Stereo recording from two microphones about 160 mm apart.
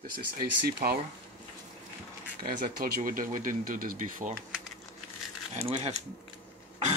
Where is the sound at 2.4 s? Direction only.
60° right (ahead or behind).